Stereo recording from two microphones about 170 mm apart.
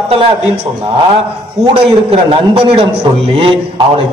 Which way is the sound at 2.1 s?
35° right (ahead or behind).